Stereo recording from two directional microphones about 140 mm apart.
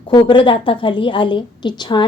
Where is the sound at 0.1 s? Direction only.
35° left (ahead or behind).